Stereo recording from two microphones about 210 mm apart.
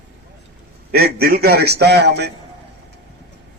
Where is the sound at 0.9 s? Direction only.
45° right (ahead or behind).